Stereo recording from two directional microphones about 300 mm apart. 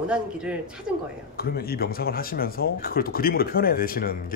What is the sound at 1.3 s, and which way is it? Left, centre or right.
Speech, left.